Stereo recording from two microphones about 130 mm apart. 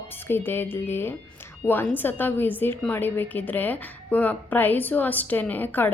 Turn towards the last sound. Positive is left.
turn(degrees=15)  # may be behind; listen again after turning